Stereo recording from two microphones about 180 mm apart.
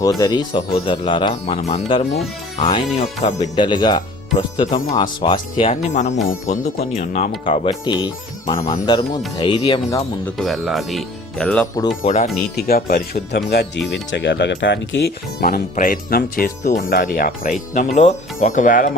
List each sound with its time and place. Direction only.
0.0 s speech: 20° left (ahead or behind)
5.9 s speech: 40° left (ahead or behind)
7.7 s speech: 25° left (ahead or behind)
10.3 s speech: centre (ahead or behind)
11.6 s speech: 20° left (ahead or behind)
12.0 s speech: 40° left (ahead or behind)
12.5 s speech: 55° left (ahead or behind)
13.9 s speech: 75° left (ahead or behind); by 18.9 s 45° left (ahead or behind)